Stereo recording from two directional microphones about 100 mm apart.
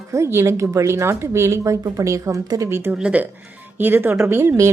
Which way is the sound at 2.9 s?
10° right (ahead or behind).